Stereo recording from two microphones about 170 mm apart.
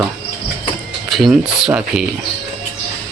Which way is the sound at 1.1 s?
Centre (ahead or behind).